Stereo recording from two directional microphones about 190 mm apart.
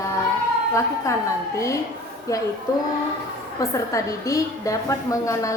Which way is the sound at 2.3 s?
15° left (ahead or behind).